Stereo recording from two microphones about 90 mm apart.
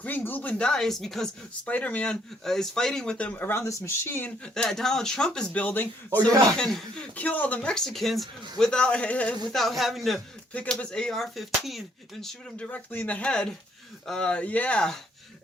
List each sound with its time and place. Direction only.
0.0 s speech: 20° left (ahead or behind); by 1.3 s 5° left (ahead or behind)
1.6 s speech: 15° left (ahead or behind)
2.4 s speech: 5° left (ahead or behind); by 4.3 s 25° left (ahead or behind)
4.5 s speech: 5° left (ahead or behind)
6.6 s speech: 5° left (ahead or behind)
9.5 s speech: centre (ahead or behind)
10.5 s speech: 15° left (ahead or behind)
12.7 s speech: 15° left (ahead or behind)